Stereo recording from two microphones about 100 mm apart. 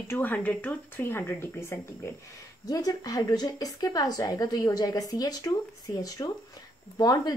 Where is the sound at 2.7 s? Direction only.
40° left (ahead or behind).